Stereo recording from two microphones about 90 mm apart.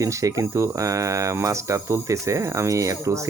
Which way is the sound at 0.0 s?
35° right (ahead or behind).